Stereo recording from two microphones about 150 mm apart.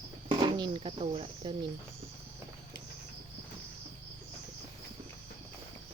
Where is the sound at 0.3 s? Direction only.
35° right (ahead or behind).